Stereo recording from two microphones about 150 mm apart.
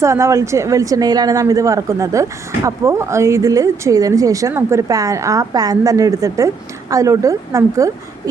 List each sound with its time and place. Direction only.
0.0 s a woman's voice: 20° right (ahead or behind)